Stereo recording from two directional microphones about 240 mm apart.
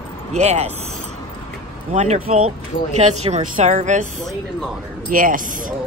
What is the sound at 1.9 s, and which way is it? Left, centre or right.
Speech, right.